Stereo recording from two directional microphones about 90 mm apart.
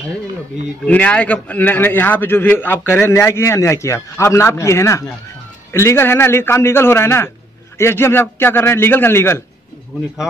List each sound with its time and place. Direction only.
0.8 s a man's voice: 15° left (ahead or behind)